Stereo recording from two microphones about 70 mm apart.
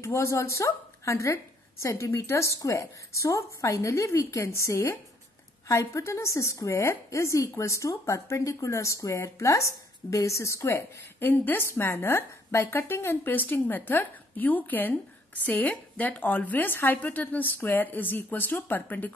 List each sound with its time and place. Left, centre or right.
0.0 s a woman's voice: left